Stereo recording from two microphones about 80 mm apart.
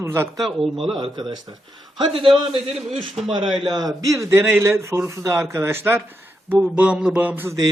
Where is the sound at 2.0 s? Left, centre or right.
Right.